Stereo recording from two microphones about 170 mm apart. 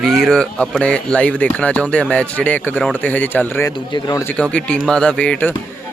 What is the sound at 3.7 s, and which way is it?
Speech, 25° left (ahead or behind).